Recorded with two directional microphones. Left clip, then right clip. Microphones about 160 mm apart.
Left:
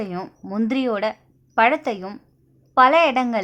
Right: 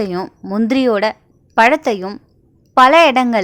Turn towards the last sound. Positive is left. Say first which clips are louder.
# right 7 dB
turn(degrees=-40)  # may be behind; listen again after turning